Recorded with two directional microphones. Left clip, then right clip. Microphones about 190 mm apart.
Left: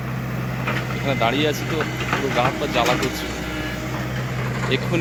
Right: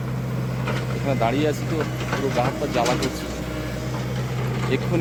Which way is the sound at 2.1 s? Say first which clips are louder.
Left 2 dB; 65° right (ahead or behind).